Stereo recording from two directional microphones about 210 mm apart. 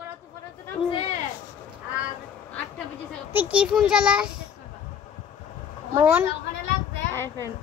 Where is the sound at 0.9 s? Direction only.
30° left (ahead or behind).